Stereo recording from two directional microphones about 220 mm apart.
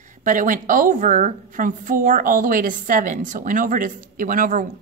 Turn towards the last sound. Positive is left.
turn(degrees=-35)  # may be behind; listen again after turning